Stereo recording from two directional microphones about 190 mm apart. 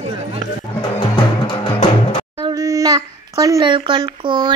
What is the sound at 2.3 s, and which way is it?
A child's voice, 20° right (ahead or behind).